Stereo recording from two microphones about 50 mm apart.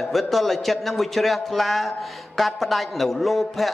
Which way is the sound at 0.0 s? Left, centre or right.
Centre.